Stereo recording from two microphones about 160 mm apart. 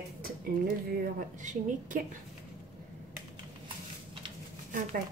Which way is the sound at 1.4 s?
50° right (ahead or behind).